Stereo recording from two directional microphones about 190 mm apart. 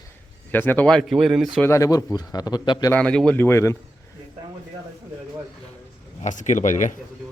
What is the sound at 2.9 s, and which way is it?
Speech, 5° left (ahead or behind).